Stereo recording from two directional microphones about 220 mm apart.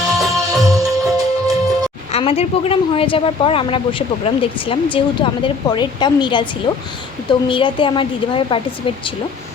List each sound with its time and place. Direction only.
0.6 s music: 15° right (ahead or behind)
2.1 s speech: 25° left (ahead or behind)